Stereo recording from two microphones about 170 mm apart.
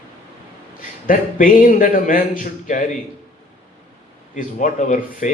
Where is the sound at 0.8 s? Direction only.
55° left (ahead or behind).